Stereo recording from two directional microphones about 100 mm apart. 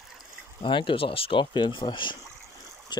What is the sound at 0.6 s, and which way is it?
Speech, 55° left (ahead or behind).